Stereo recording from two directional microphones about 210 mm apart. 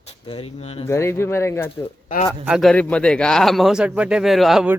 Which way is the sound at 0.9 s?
10° left (ahead or behind).